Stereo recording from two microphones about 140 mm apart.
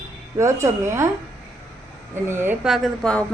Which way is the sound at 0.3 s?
20° right (ahead or behind).